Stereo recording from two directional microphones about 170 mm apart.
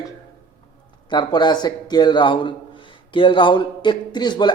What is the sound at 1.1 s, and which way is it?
Speech, 25° left (ahead or behind).